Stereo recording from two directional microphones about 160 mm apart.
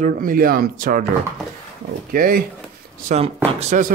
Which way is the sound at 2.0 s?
65° right (ahead or behind).